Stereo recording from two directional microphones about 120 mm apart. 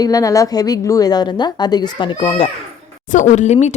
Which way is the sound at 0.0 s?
30° left (ahead or behind).